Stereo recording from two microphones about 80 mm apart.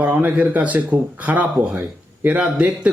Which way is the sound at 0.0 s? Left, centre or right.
Centre.